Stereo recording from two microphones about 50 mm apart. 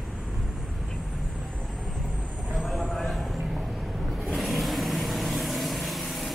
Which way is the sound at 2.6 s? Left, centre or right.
Centre.